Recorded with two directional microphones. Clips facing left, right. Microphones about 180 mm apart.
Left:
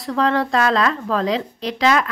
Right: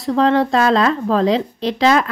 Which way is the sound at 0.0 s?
25° right (ahead or behind).